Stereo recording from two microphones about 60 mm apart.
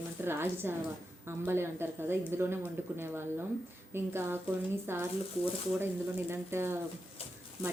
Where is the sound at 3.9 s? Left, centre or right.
Right.